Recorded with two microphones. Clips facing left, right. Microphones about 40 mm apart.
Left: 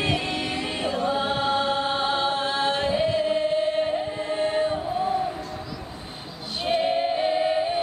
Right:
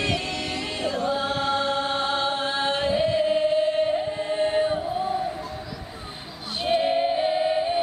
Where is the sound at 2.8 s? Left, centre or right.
Centre.